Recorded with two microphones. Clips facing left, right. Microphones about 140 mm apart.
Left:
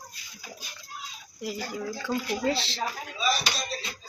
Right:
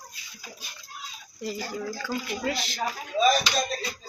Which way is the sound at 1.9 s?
25° left (ahead or behind).